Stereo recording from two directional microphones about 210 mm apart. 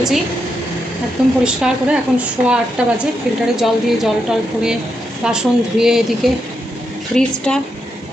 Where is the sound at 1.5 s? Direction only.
5° right (ahead or behind).